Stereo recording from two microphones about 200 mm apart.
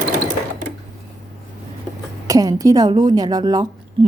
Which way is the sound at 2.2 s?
15° right (ahead or behind).